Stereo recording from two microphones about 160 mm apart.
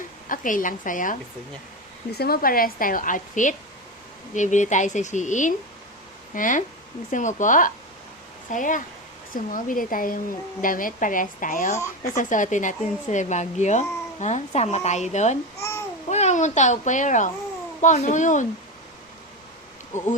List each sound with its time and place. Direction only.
0.3 s a woman's voice: 55° left (ahead or behind)
2.1 s a woman's voice: 75° left (ahead or behind); by 18.4 s 50° left (ahead or behind)